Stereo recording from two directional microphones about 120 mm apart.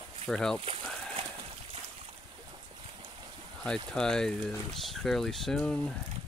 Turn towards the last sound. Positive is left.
turn(degrees=5)  # may be behind; listen again after turning